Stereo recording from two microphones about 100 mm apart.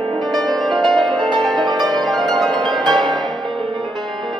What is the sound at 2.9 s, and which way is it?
Music, 50° right (ahead or behind).